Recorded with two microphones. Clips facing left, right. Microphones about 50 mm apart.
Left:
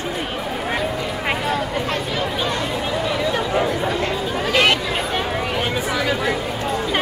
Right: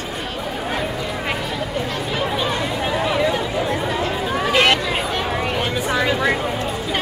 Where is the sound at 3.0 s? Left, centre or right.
Centre.